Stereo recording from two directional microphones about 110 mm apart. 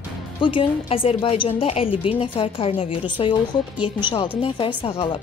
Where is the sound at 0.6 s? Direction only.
60° left (ahead or behind).